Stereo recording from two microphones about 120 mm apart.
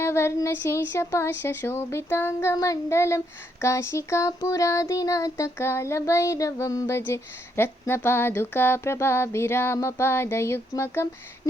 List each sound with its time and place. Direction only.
0.0 s child singing: 20° left (ahead or behind)